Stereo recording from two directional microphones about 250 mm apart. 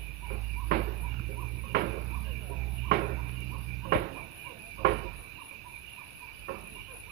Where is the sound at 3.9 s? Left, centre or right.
Right.